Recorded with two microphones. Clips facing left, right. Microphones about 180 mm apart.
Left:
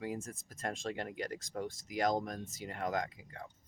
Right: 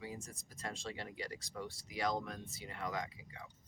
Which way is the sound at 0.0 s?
55° left (ahead or behind).